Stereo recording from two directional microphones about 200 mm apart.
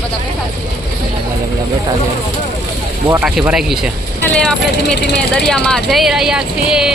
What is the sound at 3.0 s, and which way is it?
Speech, 10° right (ahead or behind).